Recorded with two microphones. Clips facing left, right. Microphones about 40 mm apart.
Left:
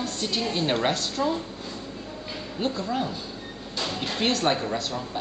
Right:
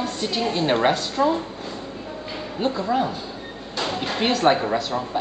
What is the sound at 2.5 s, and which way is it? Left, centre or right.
Speech, centre.